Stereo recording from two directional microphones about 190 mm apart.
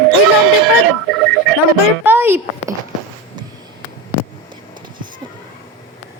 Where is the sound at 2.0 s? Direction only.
10° right (ahead or behind).